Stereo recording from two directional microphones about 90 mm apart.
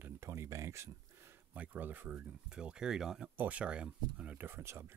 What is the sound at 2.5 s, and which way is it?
Speech, 10° right (ahead or behind).